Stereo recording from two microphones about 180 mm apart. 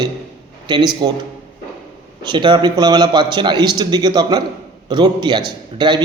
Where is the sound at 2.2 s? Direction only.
25° right (ahead or behind).